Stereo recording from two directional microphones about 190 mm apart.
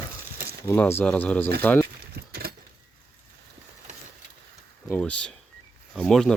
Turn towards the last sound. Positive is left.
turn(degrees=0)  # may be behind; listen again after turning